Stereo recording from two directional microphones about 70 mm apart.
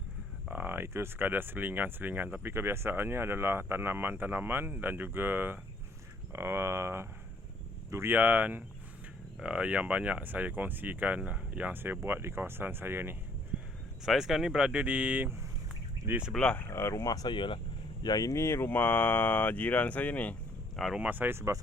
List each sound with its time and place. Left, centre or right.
0.5 s speech: right
8.1 s speech: right
14.0 s speech: centre; by 15.3 s right
16.3 s speech: centre
16.6 s speech: left
18.0 s speech: left
18.3 s speech: left
21.0 s speech: right